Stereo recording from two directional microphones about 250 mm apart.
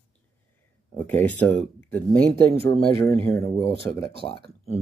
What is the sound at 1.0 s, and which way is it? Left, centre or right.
Speech, centre.